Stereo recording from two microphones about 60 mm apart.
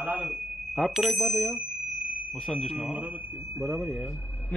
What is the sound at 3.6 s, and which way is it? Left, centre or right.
Speech, centre.